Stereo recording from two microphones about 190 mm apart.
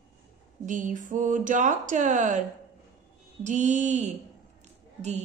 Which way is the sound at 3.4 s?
40° right (ahead or behind).